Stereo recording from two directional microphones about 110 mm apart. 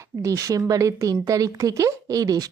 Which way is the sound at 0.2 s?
30° right (ahead or behind).